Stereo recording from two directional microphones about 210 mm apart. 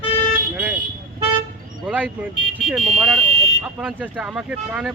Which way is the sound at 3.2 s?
25° right (ahead or behind).